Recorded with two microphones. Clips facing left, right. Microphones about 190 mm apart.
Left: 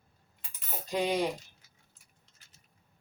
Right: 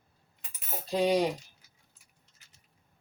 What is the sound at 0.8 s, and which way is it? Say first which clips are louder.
Cutlery: right 4 dB; 35° right (ahead or behind).